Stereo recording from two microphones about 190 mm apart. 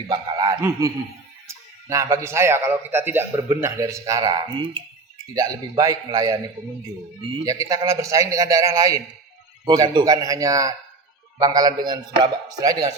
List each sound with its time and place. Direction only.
0.1 s a man's voice: 20° right (ahead or behind)
7.4 s a man's voice: 15° right (ahead or behind)